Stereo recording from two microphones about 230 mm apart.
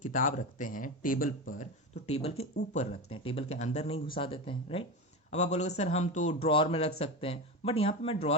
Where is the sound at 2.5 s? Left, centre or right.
Left.